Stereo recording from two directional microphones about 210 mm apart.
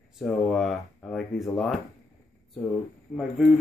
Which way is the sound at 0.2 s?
Centre (ahead or behind).